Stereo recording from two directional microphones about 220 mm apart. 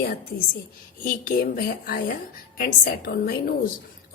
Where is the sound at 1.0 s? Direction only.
40° left (ahead or behind).